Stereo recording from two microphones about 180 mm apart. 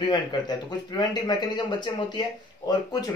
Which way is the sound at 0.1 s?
25° left (ahead or behind).